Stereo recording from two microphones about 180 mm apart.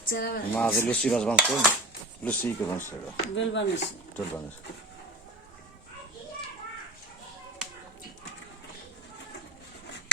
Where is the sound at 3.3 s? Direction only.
85° left.